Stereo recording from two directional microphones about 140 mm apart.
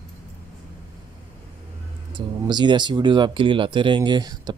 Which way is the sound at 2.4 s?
30° right (ahead or behind).